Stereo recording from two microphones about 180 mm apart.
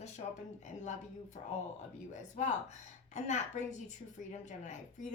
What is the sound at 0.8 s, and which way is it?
A woman's voice, 40° left (ahead or behind).